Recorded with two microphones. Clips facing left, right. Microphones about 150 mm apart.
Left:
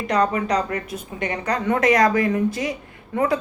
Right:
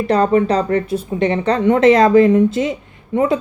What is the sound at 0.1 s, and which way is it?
Speech, 30° right (ahead or behind).